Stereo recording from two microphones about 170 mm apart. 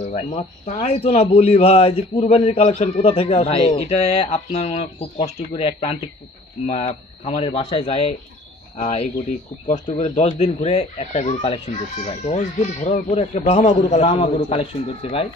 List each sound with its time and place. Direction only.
0.1 s speech: 40° left (ahead or behind)